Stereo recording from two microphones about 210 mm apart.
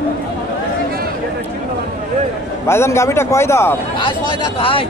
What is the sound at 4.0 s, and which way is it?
Speech, 25° left (ahead or behind).